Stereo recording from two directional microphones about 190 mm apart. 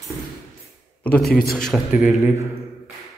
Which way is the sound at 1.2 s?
55° left (ahead or behind).